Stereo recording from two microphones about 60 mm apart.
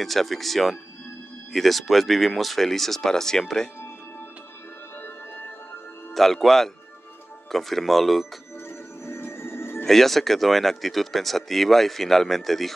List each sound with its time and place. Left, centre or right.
0.0 s speech: centre
6.1 s speech: centre
9.0 s music: left
9.8 s speech: centre